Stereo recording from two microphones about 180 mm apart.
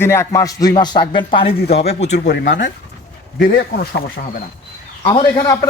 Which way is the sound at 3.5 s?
65° left (ahead or behind).